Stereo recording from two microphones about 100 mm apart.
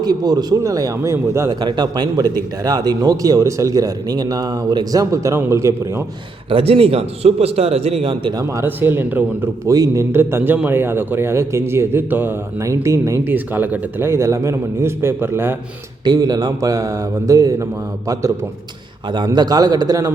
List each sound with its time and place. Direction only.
0.0 s speech: 45° right (ahead or behind)
1.6 s a man's voice: 50° right (ahead or behind); by 6.0 s 30° right (ahead or behind)
6.5 s a man's voice: 70° right (ahead or behind)
8.6 s a man's voice: 20° right (ahead or behind)
9.6 s a man's voice: 35° right (ahead or behind)
16.0 s speech: 40° right (ahead or behind)
19.1 s speech: 45° right (ahead or behind)